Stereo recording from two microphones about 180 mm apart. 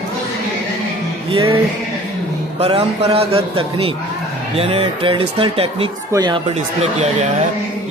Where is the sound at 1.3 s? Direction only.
30° right (ahead or behind).